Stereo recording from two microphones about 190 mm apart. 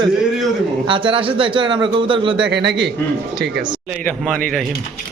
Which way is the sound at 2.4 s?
65° right (ahead or behind).